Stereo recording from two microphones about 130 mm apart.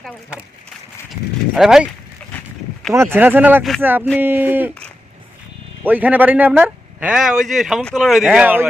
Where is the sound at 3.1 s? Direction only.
15° right (ahead or behind).